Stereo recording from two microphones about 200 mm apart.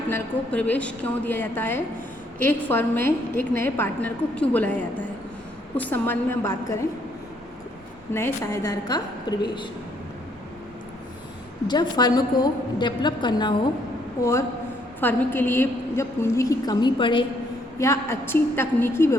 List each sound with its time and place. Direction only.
0.1 s a woman's voice: 10° left (ahead or behind)
8.1 s a woman's voice: 15° left (ahead or behind)
11.7 s a woman's voice: 20° left (ahead or behind)
15.0 s a woman's voice: 10° left (ahead or behind)